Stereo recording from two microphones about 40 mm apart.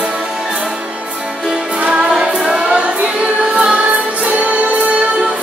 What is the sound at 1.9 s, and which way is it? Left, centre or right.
Music, centre.